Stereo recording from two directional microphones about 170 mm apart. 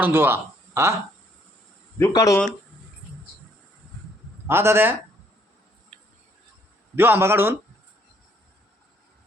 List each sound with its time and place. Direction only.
0.0 s speech: 10° right (ahead or behind)
2.0 s speech: 20° left (ahead or behind)
4.4 s a man's voice: 15° right (ahead or behind)
5.9 s tick-tock: 40° right (ahead or behind)
6.9 s a man's voice: 10° right (ahead or behind)